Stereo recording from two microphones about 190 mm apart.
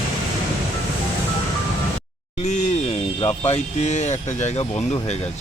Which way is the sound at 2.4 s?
40° left (ahead or behind).